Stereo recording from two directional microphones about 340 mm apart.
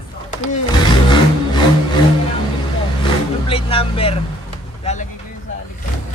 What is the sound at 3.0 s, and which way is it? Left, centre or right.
Speech, centre.